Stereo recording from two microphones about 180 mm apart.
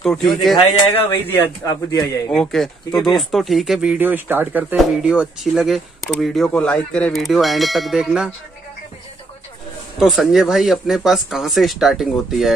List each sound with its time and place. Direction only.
0.0 s speech: 5° left (ahead or behind)
0.6 s speech: 30° left (ahead or behind)
1.4 s a man's voice: 20° left (ahead or behind)
2.3 s speech: 5° left (ahead or behind)
9.9 s speech: centre (ahead or behind)